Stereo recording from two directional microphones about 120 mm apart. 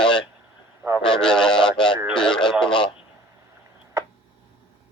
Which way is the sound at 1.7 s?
40° left (ahead or behind).